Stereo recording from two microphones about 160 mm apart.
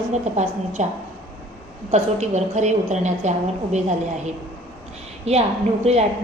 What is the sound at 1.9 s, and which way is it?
A woman's voice, 45° right (ahead or behind).